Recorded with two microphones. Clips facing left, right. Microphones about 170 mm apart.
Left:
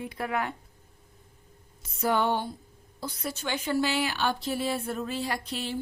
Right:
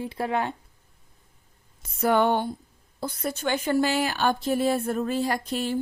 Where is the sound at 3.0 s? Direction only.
50° right (ahead or behind).